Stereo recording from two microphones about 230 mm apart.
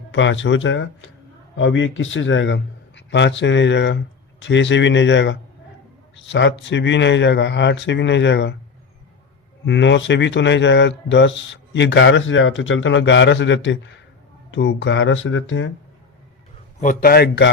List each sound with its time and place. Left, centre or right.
0.1 s speech: left
9.6 s speech: left
16.8 s a man's voice: left